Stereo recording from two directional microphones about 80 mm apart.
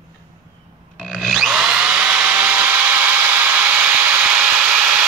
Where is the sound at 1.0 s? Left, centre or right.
Centre.